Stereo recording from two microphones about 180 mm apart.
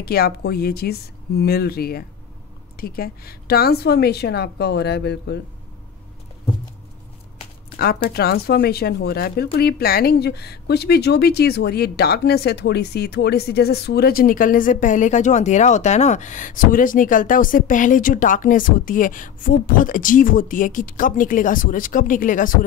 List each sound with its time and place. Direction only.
0.0 s a woman's voice: 60° left (ahead or behind)
7.7 s a sound: 55° left (ahead or behind)
8.2 s speech: 60° left (ahead or behind)